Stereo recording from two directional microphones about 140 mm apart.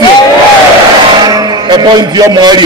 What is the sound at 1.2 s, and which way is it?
Music, 30° right (ahead or behind).